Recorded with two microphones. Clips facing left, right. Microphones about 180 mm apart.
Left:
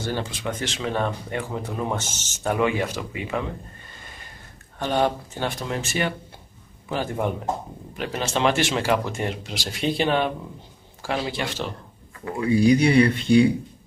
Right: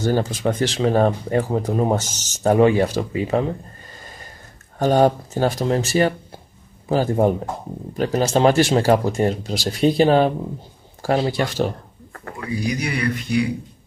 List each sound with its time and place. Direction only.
0.0 s speech: 40° right (ahead or behind)
4.7 s speech: 40° right (ahead or behind)
12.4 s speech: 30° left (ahead or behind)